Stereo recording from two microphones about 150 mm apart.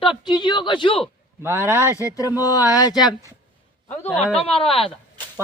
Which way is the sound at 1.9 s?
20° left (ahead or behind).